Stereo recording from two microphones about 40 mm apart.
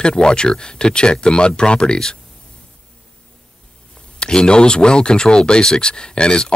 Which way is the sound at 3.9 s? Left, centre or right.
Left.